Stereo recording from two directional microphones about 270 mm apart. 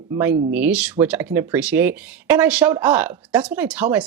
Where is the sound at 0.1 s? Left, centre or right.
Centre.